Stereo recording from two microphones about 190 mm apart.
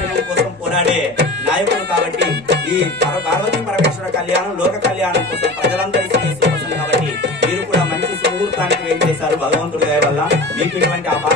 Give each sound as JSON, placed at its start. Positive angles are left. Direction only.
{"t": 2.1, "sound": "music", "side_deg": -65}
{"t": 9.8, "sound": "speech", "side_deg": -65}